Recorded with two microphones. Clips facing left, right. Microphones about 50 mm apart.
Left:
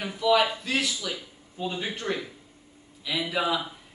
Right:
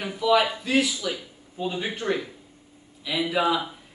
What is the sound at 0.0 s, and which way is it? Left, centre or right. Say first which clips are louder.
Speech: right 1 dB; centre.